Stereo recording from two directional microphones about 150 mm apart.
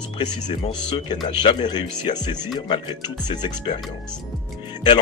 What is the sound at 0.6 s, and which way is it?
Speech, 35° left (ahead or behind).